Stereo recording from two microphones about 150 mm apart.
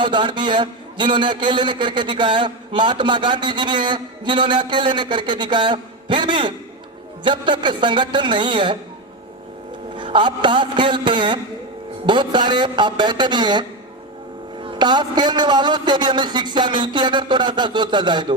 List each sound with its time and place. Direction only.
0.0 s a man's voice: 30° right (ahead or behind)
9.9 s a man's voice: 30° right (ahead or behind)